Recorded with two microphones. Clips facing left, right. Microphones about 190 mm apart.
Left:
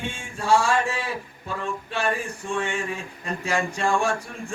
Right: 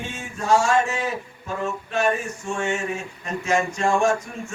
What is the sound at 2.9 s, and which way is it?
A man's voice, 35° left (ahead or behind).